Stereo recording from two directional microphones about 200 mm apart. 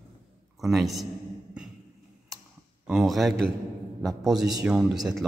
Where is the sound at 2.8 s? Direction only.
Centre (ahead or behind).